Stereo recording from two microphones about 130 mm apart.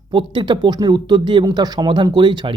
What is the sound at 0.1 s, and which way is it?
Speech, 40° right (ahead or behind).